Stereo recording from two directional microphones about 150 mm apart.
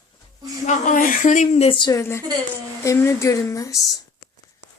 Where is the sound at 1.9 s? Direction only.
15° left (ahead or behind).